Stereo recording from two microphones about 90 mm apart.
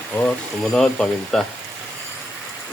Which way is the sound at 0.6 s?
5° left (ahead or behind).